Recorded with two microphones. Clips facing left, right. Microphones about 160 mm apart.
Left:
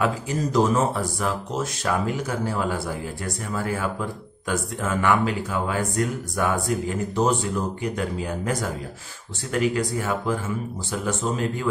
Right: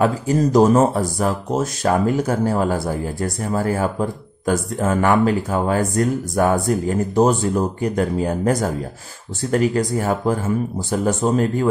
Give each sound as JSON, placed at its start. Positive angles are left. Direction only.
{"t": 0.0, "sound": "speech", "side_deg": -40}